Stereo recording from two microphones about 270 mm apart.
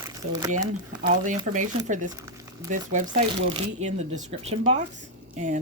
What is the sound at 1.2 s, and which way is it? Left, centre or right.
Speech, right.